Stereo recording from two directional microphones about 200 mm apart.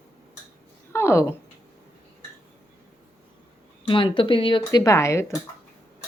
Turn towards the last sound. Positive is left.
turn(degrees=15)  # may be behind; listen again after turning